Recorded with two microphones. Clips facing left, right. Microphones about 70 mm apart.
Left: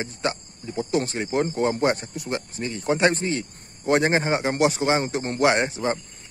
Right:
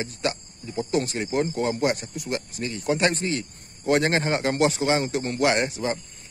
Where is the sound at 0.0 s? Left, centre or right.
Left.